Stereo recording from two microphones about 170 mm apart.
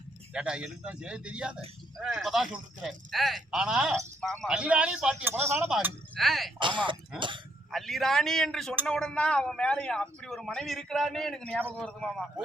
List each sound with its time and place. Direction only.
0.3 s speech: 5° right (ahead or behind)
6.1 s speech: centre (ahead or behind)
6.6 s speech: 30° right (ahead or behind)
7.7 s speech: centre (ahead or behind)